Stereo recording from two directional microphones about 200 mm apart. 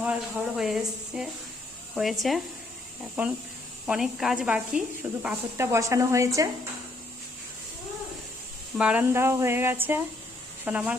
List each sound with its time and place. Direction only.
0.0 s speech: 5° right (ahead or behind)
8.8 s speech: 5° right (ahead or behind)